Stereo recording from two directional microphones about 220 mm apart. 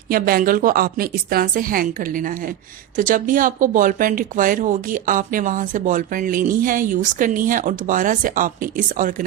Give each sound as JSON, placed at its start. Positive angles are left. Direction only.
{"t": 0.1, "sound": "speech", "side_deg": -40}